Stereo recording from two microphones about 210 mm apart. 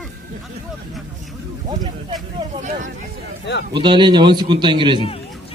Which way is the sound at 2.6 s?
35° right (ahead or behind).